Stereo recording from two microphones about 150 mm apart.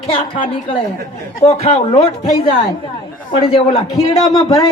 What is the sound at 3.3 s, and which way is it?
Speech, 40° left (ahead or behind).